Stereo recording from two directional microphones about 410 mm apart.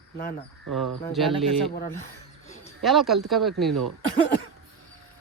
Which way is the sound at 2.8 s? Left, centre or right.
Centre.